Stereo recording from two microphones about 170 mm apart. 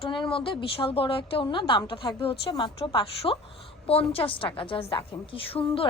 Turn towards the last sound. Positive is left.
turn(degrees=35)  # may be behind; listen again after turning